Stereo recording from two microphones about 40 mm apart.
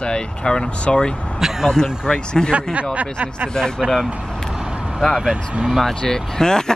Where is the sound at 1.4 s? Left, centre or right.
Centre.